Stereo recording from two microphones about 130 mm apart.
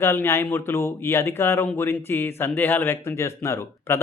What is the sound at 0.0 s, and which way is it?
Speech, 20° left (ahead or behind).